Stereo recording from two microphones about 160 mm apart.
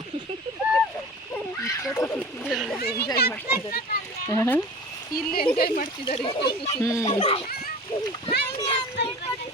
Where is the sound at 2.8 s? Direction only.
80° left.